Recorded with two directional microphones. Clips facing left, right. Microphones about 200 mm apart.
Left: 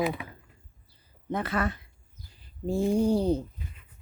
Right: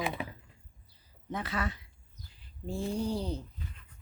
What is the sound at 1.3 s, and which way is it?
Speech, 55° left (ahead or behind).